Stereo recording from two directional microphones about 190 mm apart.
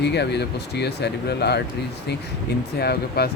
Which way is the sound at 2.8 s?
55° left (ahead or behind).